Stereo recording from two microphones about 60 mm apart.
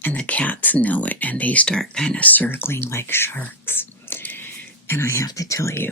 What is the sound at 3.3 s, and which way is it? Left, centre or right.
Whispering, left.